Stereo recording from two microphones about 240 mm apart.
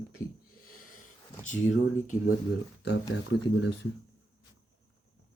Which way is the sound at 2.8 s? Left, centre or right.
Left.